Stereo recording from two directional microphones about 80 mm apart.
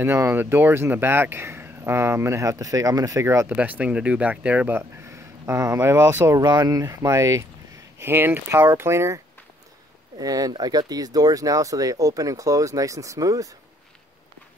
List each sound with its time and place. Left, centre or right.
0.0 s speech: right
3.4 s speech: centre
5.0 s speech: right
6.4 s speech: right
8.0 s speech: right
10.1 s speech: right